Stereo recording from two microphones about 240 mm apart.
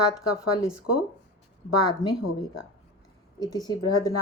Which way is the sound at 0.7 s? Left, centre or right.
Left.